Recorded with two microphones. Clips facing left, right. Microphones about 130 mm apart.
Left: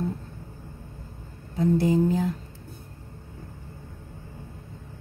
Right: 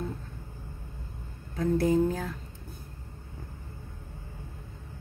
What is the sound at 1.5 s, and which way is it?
Speech, 20° left (ahead or behind).